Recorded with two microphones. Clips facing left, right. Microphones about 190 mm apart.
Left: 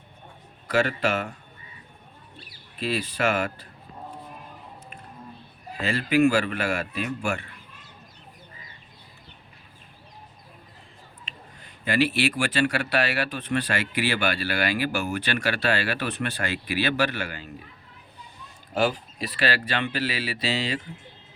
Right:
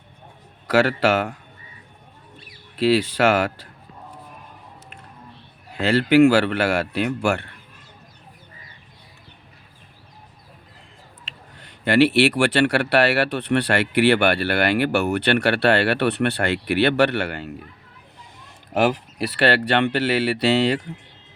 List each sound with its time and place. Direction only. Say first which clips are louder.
0.7 s speech: right 6 dB; 85° right
2.7 s speech: right 10 dB; 85° right
5.7 s speech: right 7 dB; 75° right (ahead or behind)
11.3 s speech: right 1 dB; 75° right (ahead or behind)
18.7 s speech: right 5 dB; 75° right (ahead or behind)